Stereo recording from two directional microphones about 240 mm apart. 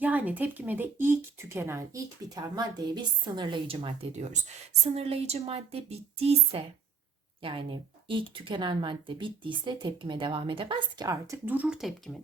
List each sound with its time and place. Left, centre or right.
0.0 s speech: centre